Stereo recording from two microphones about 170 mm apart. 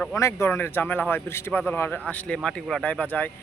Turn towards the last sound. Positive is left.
turn(degrees=10)  # may be behind; listen again after turning